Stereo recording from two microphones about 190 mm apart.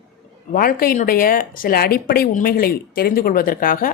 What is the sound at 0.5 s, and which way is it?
Speech, 50° left (ahead or behind).